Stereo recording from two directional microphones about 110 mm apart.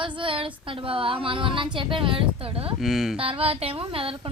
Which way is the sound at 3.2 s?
60° right (ahead or behind).